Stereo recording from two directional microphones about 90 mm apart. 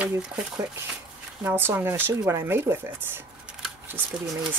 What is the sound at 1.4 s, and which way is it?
Speech, 25° right (ahead or behind).